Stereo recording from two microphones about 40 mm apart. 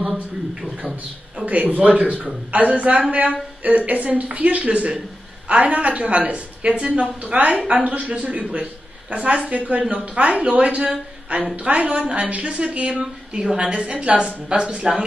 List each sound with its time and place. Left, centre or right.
0.0 s speech: centre
1.4 s a woman's voice: right; by 15.0 s centre